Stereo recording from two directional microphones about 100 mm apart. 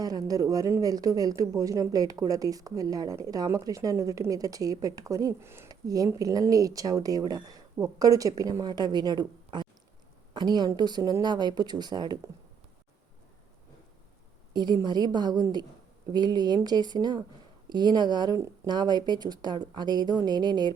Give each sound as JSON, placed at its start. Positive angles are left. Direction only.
{"t": 0.0, "sound": "a woman's voice", "side_deg": -40}
{"t": 14.5, "sound": "a woman's voice", "side_deg": -45}
{"t": 18.3, "sound": "speech", "side_deg": -35}
{"t": 18.7, "sound": "a woman's voice", "side_deg": -45}